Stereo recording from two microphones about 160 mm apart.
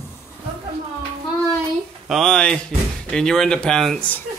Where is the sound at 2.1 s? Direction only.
5° left (ahead or behind).